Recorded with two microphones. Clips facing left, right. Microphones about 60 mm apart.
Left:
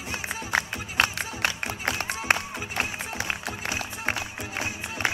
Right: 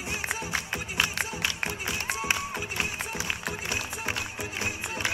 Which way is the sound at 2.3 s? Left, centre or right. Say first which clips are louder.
Left 7 dB; left.